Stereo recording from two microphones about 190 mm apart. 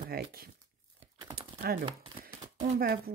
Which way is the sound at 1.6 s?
50° right (ahead or behind).